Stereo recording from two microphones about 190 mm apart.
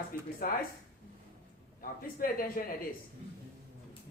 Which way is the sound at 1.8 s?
50° left (ahead or behind).